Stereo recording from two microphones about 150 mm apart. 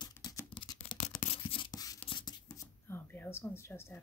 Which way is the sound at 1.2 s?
40° left (ahead or behind).